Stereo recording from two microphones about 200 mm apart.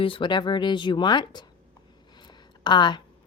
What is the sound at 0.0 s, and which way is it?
Speech, 25° left (ahead or behind).